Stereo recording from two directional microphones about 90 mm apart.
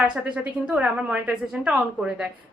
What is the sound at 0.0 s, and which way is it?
Speech, 10° right (ahead or behind).